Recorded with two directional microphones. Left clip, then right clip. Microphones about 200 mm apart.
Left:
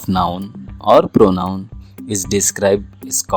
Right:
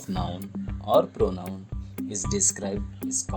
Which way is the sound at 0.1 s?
30° left (ahead or behind).